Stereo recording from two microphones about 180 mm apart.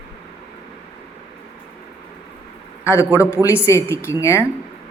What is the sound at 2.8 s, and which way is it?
A man's voice, 15° left (ahead or behind).